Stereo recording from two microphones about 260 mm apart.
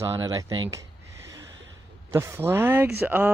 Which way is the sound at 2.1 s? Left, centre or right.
Centre.